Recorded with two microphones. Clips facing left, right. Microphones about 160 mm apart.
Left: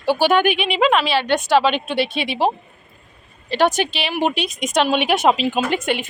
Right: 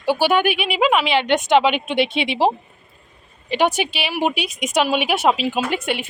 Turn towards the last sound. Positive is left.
turn(degrees=-5)  # may be behind; listen again after turning